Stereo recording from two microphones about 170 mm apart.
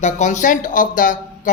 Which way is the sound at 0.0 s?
45° left (ahead or behind).